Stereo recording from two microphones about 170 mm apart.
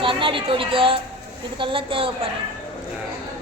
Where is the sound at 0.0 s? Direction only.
30° right (ahead or behind).